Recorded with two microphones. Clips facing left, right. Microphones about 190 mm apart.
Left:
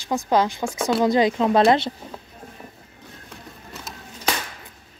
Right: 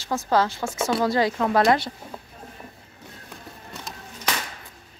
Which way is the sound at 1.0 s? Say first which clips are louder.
Left 5 dB; 20° left (ahead or behind).